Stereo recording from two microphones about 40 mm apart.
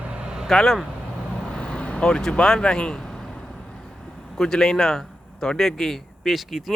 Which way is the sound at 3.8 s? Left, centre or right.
Centre.